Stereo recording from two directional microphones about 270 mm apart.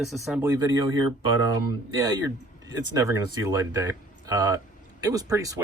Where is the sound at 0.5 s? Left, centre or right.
Centre.